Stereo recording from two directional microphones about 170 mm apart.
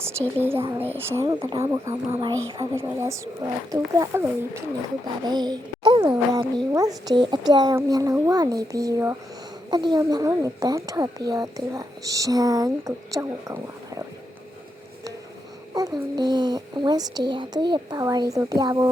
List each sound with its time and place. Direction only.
0.3 s a woman's voice: 15° right (ahead or behind)
15.7 s a woman's voice: 20° right (ahead or behind)